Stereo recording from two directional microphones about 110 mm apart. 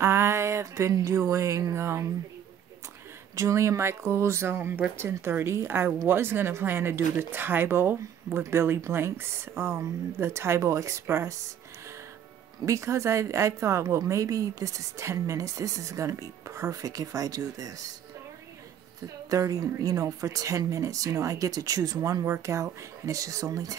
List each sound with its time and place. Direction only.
0.0 s a sound: 25° right (ahead or behind)
3.3 s a woman's voice: 25° right (ahead or behind)
12.6 s a woman's voice: 30° right (ahead or behind)
19.3 s speech: 30° right (ahead or behind)